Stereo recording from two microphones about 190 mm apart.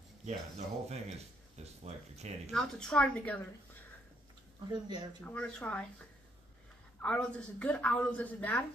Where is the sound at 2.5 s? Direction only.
5° left (ahead or behind).